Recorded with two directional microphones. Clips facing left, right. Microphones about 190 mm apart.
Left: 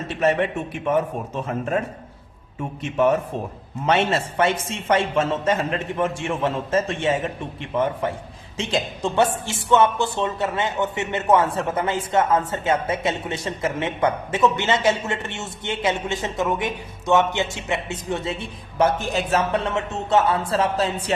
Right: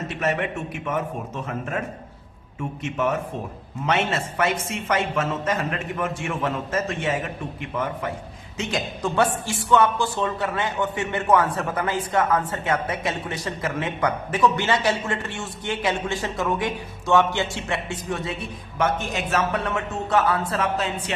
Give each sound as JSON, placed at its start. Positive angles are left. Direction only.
{"t": 0.2, "sound": "a woman's voice", "side_deg": 30}
{"t": 3.8, "sound": "a woman's voice", "side_deg": 30}